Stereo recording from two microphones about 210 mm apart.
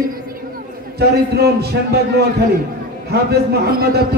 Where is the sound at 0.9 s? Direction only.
50° right (ahead or behind).